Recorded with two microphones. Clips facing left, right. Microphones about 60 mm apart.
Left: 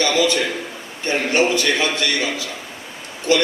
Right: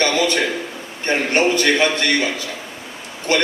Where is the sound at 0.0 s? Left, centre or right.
Right.